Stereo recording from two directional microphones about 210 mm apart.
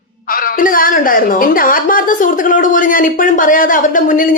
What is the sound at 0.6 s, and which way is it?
A woman's voice, 40° left (ahead or behind).